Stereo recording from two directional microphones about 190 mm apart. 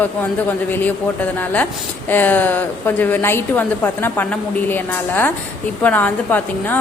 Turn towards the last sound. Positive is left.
turn(degrees=10)  # may be behind; listen again after turning